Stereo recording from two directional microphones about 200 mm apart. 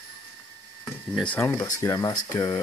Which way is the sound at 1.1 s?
5° left (ahead or behind).